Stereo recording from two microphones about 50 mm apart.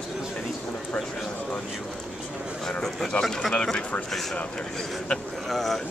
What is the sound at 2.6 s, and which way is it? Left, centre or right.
Speech, centre.